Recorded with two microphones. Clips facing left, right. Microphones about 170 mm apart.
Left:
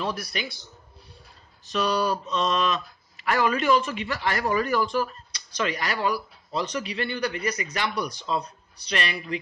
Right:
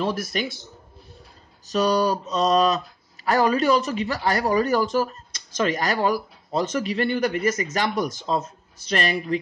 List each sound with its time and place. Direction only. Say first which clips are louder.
0.0 s a man's voice: right 5 dB; 45° right (ahead or behind)
1.7 s mantra: right 4 dB; 40° right (ahead or behind)
3.3 s a man's voice: right 3 dB; 40° right (ahead or behind)